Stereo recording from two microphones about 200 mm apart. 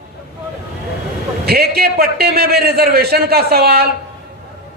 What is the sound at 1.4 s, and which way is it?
A man's voice, 50° right (ahead or behind).